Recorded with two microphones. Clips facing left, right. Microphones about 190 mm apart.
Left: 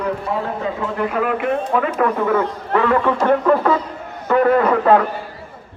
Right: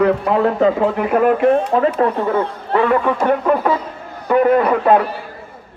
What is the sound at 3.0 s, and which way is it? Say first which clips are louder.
Speech: even; 15° right (ahead or behind).